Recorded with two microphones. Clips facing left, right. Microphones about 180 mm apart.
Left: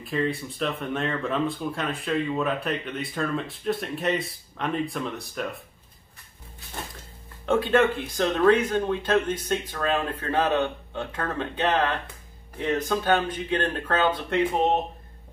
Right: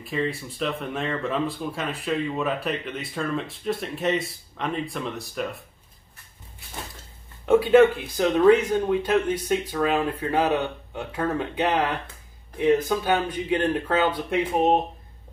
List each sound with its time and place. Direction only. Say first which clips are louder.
0.0 s speech: left 1 dB; centre (ahead or behind)
7.4 s speech: right 5 dB; 10° right (ahead or behind)